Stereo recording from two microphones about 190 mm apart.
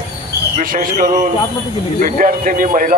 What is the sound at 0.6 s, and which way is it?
A man's voice, 45° right (ahead or behind).